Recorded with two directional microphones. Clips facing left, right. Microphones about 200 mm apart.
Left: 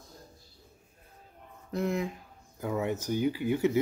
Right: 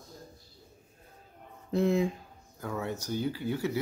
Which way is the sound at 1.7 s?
25° right (ahead or behind).